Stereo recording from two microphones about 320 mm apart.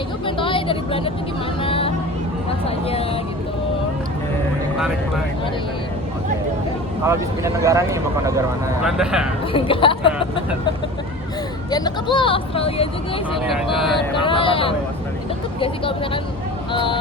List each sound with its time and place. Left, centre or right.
0.3 s vehicle: centre
1.6 s a sound: centre
7.1 s speech: centre
9.5 s speech: centre
11.7 s speech: centre
13.5 s speech: centre
14.2 s speech: centre